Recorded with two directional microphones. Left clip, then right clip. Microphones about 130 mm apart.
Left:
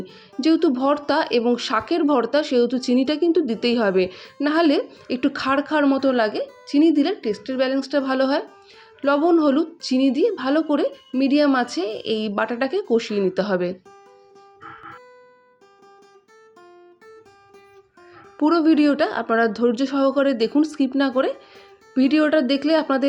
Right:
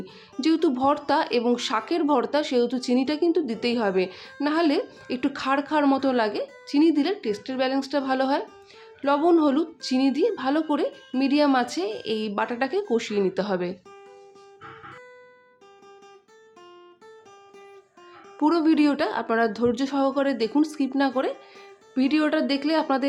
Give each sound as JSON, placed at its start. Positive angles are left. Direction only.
{"t": 0.0, "sound": "speech", "side_deg": 20}
{"t": 18.3, "sound": "speech", "side_deg": 15}